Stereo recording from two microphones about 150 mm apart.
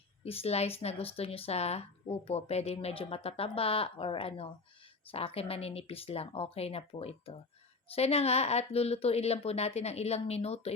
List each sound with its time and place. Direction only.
0.3 s speech: 40° left (ahead or behind)